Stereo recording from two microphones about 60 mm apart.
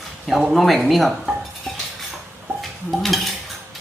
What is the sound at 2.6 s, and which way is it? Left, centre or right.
Stir, centre.